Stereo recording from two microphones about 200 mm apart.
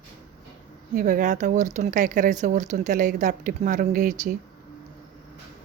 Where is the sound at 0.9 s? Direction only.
45° right (ahead or behind).